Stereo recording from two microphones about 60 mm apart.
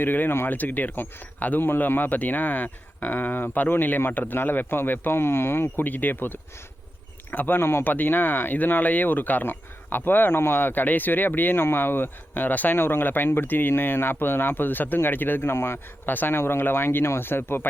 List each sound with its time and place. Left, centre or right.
0.0 s speech: left